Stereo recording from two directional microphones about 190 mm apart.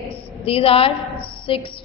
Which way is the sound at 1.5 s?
30° left (ahead or behind).